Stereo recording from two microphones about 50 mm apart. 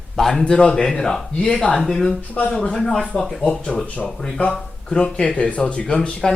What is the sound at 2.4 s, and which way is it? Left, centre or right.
Speech, left.